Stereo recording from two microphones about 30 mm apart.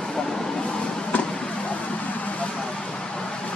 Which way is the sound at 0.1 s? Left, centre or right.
Left.